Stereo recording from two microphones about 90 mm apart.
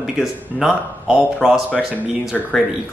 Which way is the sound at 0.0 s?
5° right (ahead or behind).